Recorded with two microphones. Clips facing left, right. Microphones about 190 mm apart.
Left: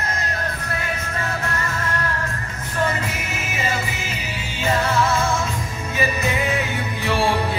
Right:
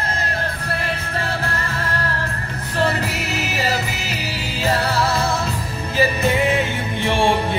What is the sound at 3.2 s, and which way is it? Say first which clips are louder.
Music: right 4 dB; 70° right (ahead or behind).